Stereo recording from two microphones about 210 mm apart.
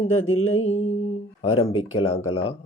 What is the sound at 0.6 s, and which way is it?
Speech, 30° left (ahead or behind).